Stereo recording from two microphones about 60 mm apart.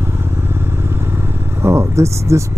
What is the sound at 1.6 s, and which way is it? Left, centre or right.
Speech, right.